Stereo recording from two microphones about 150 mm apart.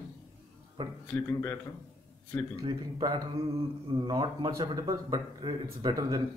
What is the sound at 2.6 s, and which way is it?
Speech, 30° right (ahead or behind).